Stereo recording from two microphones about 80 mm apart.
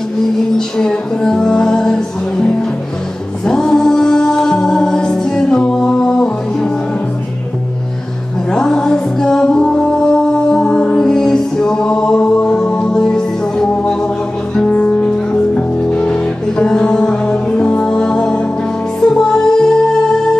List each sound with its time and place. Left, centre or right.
0.6 s music: centre
8.5 s music: centre